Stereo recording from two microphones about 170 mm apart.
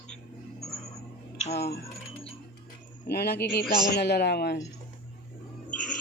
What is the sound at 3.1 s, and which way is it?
A man's voice, 65° left (ahead or behind).